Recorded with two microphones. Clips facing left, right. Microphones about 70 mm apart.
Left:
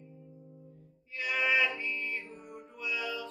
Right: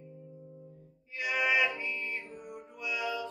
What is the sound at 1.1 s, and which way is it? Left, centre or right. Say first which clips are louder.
Music: right 1 dB; centre.